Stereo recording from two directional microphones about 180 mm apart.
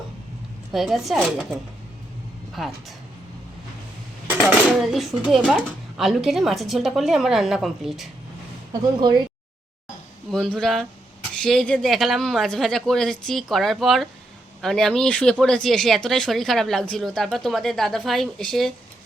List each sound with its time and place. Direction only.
0.7 s speech: centre (ahead or behind)
2.6 s speech: centre (ahead or behind)
4.3 s speech: 5° right (ahead or behind)
8.7 s speech: 25° right (ahead or behind)
10.3 s speech: 5° left (ahead or behind)